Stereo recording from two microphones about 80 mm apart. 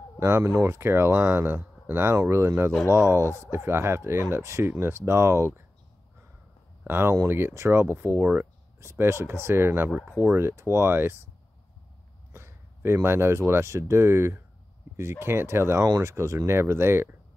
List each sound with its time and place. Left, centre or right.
0.2 s speech: right
6.9 s speech: right
12.3 s speech: right